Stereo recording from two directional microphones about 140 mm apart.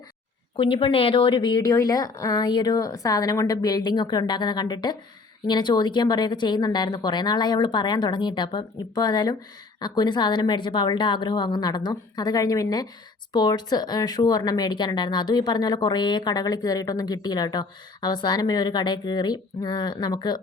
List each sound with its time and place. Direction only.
0.5 s a woman's voice: 40° left (ahead or behind)